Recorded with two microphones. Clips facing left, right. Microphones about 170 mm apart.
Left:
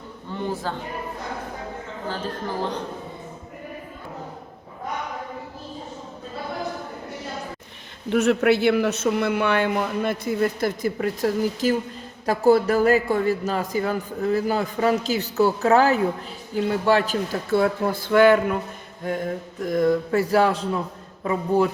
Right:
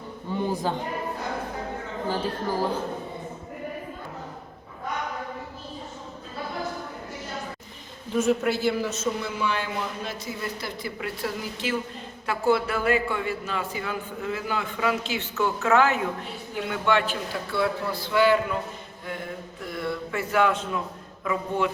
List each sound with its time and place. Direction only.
0.3 s a sound: 15° right (ahead or behind)
2.6 s speech: 5° right (ahead or behind)
8.1 s a man's voice: 70° left (ahead or behind); by 21.7 s 35° left (ahead or behind)